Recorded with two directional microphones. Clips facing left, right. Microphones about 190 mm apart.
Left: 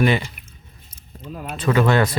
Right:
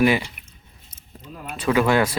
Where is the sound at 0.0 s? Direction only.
10° right (ahead or behind).